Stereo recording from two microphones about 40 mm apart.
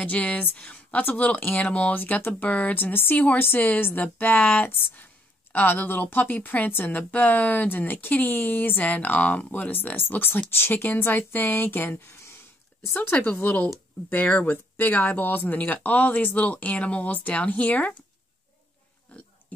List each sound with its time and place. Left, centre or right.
0.0 s a woman's voice: left
2.7 s a woman's voice: left
3.9 s a woman's voice: left
6.7 s speech: left
7.0 s a woman's voice: left
7.7 s a woman's voice: left
8.8 s speech: left
9.9 s speech: left
13.1 s speech: left
13.4 s a woman's voice: left
19.1 s speech: left